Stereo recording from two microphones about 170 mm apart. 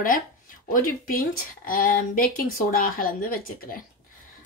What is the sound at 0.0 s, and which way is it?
Speech, 55° left (ahead or behind).